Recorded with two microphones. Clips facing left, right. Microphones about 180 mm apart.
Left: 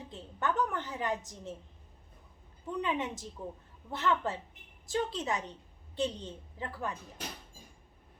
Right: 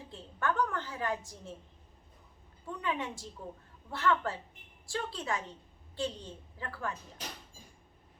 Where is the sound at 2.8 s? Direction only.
20° left (ahead or behind).